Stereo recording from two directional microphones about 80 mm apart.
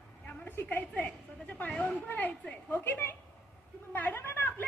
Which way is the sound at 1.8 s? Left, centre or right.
Left.